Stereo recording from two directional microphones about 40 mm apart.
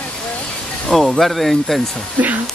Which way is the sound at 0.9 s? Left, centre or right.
Centre.